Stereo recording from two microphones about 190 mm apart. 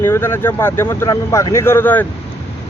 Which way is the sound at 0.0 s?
10° left (ahead or behind).